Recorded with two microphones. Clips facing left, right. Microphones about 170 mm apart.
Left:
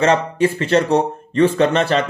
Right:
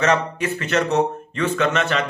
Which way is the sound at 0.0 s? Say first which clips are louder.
Left 5 dB; 30° left (ahead or behind).